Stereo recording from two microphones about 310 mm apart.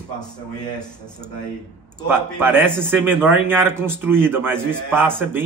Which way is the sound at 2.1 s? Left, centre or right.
Centre.